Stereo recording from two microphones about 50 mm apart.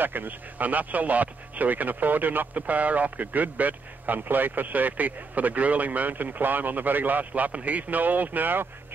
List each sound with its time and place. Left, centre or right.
0.0 s speech: right